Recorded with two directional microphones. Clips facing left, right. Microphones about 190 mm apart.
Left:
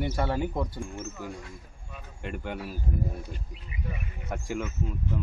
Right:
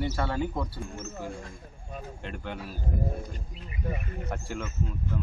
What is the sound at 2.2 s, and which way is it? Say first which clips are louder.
Speech: left 6 dB; 10° left (ahead or behind).